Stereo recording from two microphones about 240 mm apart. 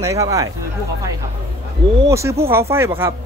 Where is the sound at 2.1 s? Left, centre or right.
Centre.